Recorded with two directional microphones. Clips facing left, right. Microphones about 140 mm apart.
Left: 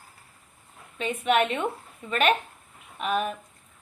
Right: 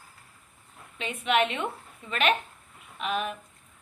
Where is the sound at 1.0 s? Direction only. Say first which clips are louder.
Left 2 dB; 45° left (ahead or behind).